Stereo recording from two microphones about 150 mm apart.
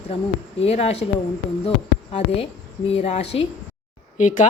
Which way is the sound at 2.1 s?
40° left (ahead or behind).